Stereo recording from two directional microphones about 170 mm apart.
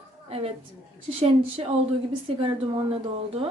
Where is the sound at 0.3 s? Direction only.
35° right (ahead or behind).